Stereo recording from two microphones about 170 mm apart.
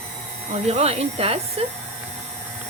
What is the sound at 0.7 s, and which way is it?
Stir, 40° right (ahead or behind).